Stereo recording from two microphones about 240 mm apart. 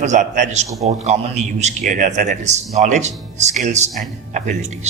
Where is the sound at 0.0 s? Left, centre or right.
Right.